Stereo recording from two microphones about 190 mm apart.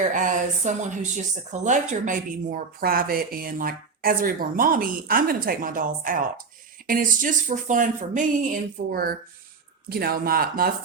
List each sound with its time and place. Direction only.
0.1 s speech: 40° right (ahead or behind)